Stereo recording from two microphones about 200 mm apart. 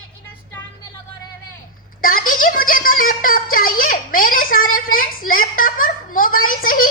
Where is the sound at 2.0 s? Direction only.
45° left (ahead or behind).